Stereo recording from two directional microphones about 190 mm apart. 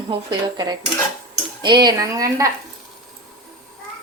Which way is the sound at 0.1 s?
25° right (ahead or behind).